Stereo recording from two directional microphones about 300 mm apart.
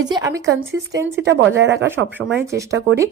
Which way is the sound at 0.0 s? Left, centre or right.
Centre.